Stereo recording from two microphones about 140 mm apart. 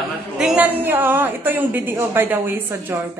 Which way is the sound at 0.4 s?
5° right (ahead or behind).